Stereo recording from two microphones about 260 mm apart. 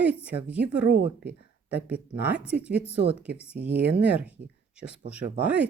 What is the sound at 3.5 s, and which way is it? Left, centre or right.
Speech, right.